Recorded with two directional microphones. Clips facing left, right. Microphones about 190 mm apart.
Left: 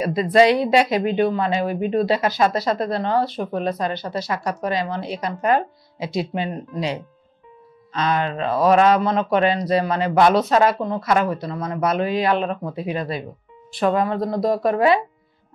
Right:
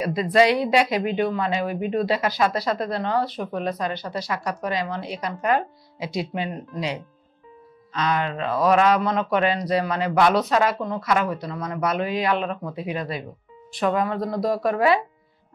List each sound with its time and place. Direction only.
0.0 s speech: 25° left (ahead or behind)